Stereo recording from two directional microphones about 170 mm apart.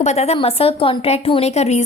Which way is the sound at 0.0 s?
40° left (ahead or behind).